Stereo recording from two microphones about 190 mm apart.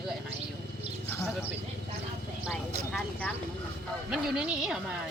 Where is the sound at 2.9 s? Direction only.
10° left (ahead or behind).